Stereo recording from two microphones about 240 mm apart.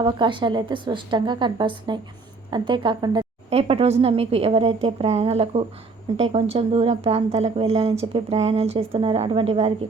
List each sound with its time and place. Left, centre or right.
0.0 s a woman's voice: centre